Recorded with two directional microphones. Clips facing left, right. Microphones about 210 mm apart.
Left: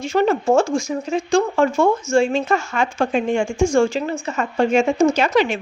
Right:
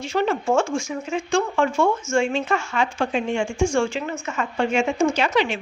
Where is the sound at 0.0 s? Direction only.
45° left (ahead or behind).